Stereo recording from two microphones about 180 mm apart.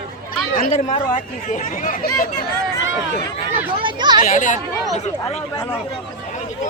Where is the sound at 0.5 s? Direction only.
45° left (ahead or behind).